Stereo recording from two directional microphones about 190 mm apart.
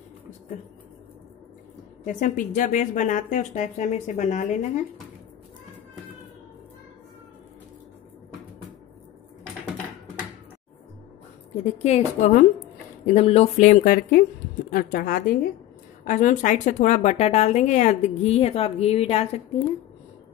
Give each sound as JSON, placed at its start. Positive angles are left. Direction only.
{"t": 2.0, "sound": "a woman's voice", "side_deg": 45}
{"t": 11.5, "sound": "a woman's voice", "side_deg": 35}